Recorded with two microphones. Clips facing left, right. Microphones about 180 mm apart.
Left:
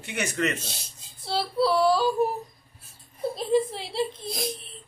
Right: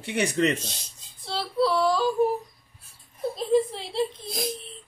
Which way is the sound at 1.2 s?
10° left (ahead or behind).